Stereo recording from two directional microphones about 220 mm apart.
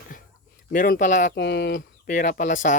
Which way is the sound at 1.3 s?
50° left (ahead or behind).